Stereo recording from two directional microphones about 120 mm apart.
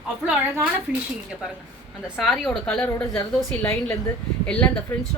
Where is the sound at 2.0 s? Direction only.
Centre (ahead or behind).